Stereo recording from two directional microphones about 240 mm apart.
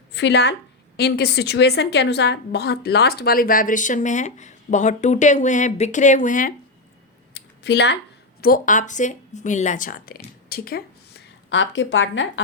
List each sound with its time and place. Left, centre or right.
0.1 s a woman's voice: left
7.3 s a sound: left
8.4 s a woman's voice: left